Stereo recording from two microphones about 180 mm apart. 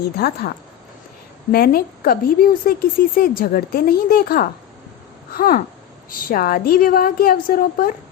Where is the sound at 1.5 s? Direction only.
55° left (ahead or behind).